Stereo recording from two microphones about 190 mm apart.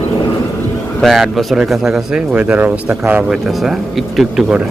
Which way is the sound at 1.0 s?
Centre (ahead or behind).